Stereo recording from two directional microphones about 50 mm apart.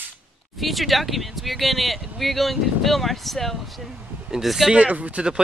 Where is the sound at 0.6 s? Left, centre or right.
Centre.